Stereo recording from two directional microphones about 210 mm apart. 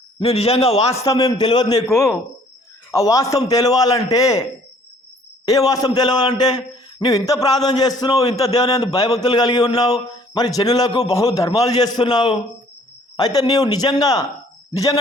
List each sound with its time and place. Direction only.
0.2 s a man's voice: 30° left (ahead or behind)
1.0 s a man's voice: 15° left (ahead or behind)
5.5 s a man's voice: 15° left (ahead or behind)